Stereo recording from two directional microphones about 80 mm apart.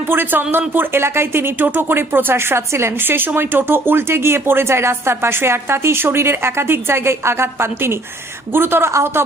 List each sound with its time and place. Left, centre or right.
0.1 s speech: right